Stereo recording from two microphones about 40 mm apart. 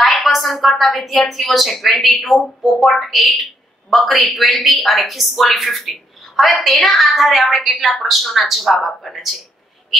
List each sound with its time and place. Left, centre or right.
0.0 s speech: centre